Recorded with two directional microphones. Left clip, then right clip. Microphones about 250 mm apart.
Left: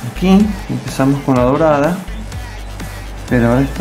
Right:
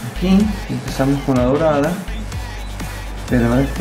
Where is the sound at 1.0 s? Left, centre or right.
Left.